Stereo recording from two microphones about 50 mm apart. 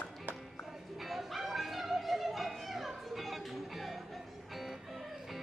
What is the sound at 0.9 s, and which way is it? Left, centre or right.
Dog, centre.